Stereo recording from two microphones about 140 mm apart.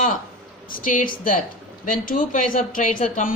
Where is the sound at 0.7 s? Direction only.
80° left.